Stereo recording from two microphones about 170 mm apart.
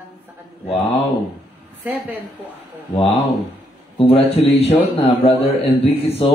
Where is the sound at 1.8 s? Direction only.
10° right (ahead or behind).